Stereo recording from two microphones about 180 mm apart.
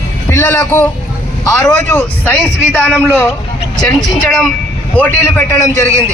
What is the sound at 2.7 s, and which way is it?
Speech, 5° right (ahead or behind).